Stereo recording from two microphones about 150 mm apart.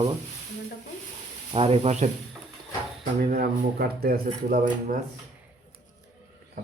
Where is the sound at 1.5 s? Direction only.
40° right (ahead or behind).